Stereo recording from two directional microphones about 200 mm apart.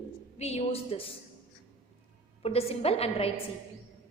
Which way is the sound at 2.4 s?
30° left (ahead or behind).